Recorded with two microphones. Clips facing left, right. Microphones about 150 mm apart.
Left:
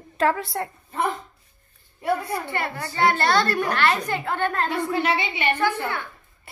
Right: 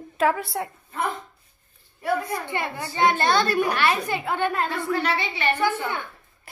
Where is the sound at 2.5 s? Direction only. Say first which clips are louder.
Even; 15° right (ahead or behind).